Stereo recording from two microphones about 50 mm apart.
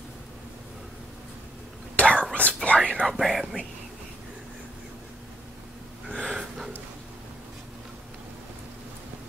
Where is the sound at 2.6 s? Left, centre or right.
Left.